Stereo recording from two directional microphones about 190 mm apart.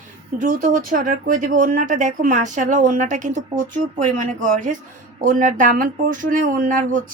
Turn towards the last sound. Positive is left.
turn(degrees=-45)  # may be behind; listen again after turning